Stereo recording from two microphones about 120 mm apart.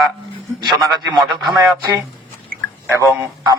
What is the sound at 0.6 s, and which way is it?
Speech, 35° right (ahead or behind).